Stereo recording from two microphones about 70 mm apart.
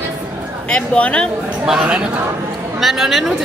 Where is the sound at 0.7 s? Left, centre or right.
Centre.